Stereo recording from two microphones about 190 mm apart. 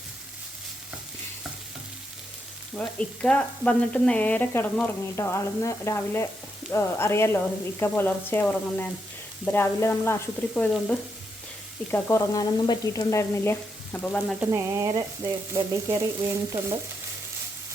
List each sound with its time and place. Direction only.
2.7 s sizzle: 5° left (ahead or behind)
14.5 s frying: 15° right (ahead or behind)